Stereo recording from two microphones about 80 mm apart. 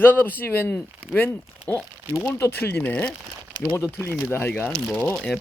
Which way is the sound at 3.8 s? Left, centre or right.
Left.